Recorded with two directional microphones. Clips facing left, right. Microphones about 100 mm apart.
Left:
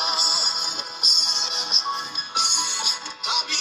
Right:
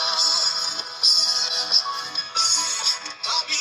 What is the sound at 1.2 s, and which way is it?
Music, 40° left (ahead or behind).